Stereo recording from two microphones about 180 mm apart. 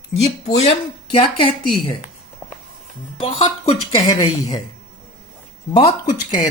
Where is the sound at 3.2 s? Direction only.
35° left (ahead or behind).